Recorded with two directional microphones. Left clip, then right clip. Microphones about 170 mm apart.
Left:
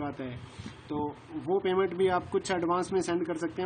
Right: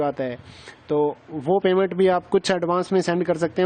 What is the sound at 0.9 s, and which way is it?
Speech, 65° right (ahead or behind).